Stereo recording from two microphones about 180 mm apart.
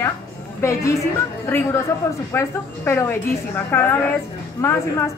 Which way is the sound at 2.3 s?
15° left (ahead or behind).